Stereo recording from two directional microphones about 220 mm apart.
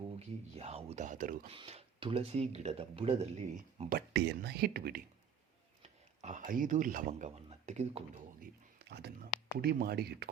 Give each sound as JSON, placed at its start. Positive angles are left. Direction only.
{"t": 0.2, "sound": "speech", "side_deg": -30}
{"t": 1.5, "sound": "speech", "side_deg": -25}
{"t": 3.8, "sound": "speech", "side_deg": -40}
{"t": 8.8, "sound": "speech", "side_deg": -50}